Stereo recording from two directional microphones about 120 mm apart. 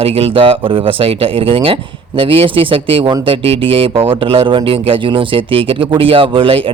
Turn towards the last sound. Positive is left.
turn(degrees=-50)  # may be behind; listen again after turning